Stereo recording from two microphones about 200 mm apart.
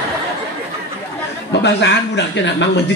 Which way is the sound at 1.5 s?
60° left (ahead or behind).